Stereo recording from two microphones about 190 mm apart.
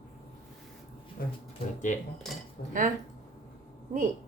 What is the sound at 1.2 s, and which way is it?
Speech, 50° left (ahead or behind).